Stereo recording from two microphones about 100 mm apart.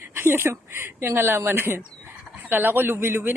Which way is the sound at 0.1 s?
25° right (ahead or behind).